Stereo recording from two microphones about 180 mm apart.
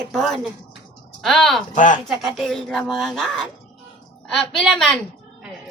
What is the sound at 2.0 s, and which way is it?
A woman's voice, centre (ahead or behind).